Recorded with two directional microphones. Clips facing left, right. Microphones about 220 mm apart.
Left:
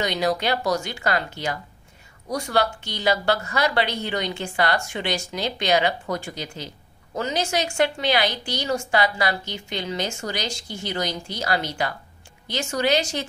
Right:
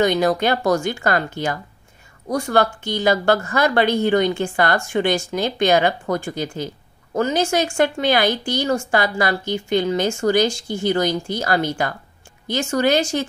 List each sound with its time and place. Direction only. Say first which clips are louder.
0.0 s a woman's voice: right 6 dB; 50° right (ahead or behind)